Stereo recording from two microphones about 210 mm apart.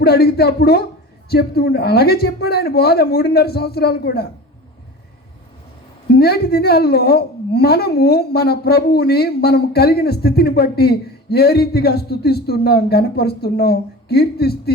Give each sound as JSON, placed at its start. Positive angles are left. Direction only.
{"t": 0.0, "sound": "a woman's voice", "side_deg": 50}
{"t": 6.1, "sound": "a woman's voice", "side_deg": 50}